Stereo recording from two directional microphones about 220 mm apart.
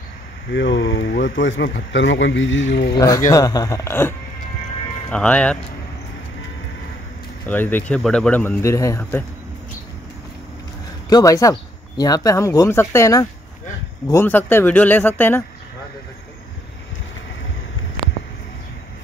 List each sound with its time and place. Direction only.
0.5 s speech: 55° left (ahead or behind)
3.0 s speech: 15° left (ahead or behind)
5.1 s speech: 5° left (ahead or behind)
7.4 s speech: 10° left (ahead or behind)
11.1 s speech: 15° left (ahead or behind)